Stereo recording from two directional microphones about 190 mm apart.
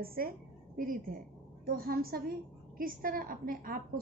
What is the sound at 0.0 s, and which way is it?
A woman's voice, 50° right (ahead or behind).